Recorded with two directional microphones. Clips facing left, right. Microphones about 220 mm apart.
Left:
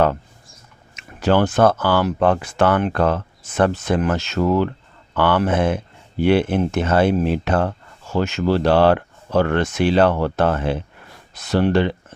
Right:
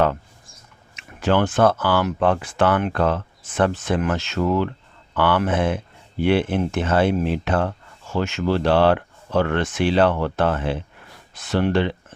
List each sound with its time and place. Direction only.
0.9 s speech: 40° left (ahead or behind)